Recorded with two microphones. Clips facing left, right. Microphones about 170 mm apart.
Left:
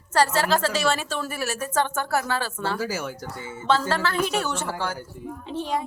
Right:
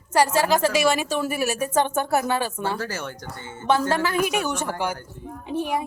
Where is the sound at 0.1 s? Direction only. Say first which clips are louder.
Right 2 dB; 15° right (ahead or behind).